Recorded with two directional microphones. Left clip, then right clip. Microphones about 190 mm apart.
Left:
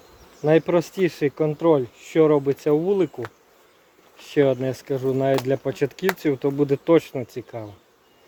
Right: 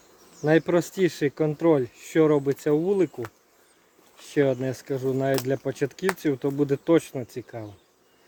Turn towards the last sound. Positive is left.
turn(degrees=-5)  # may be behind; listen again after turning